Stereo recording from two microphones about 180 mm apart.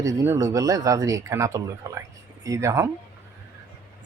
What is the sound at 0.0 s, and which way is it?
Speech, 20° right (ahead or behind).